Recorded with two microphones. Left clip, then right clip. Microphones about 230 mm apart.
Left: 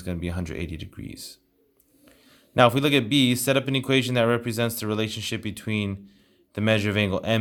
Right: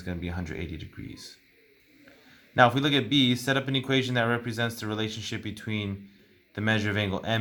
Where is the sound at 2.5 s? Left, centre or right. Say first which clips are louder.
Left 3 dB; left.